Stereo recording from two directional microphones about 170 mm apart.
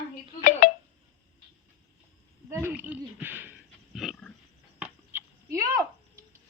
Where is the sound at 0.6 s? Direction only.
50° left (ahead or behind).